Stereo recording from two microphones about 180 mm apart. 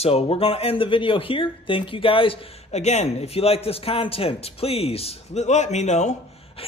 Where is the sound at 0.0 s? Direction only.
35° left (ahead or behind).